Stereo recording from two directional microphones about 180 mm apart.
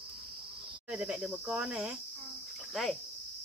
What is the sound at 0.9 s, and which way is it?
Speech, 5° right (ahead or behind).